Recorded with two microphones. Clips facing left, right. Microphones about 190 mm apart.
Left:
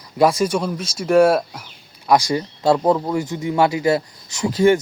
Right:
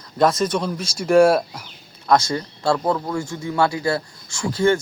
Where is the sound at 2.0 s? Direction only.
15° left (ahead or behind).